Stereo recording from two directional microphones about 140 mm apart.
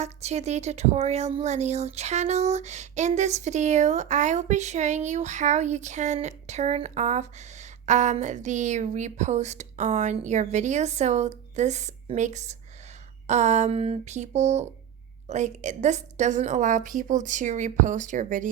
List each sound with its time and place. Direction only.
0.0 s speech: 50° right (ahead or behind); by 18.4 s 65° right (ahead or behind)